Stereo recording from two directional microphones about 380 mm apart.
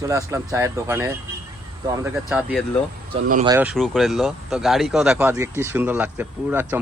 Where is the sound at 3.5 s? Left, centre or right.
Centre.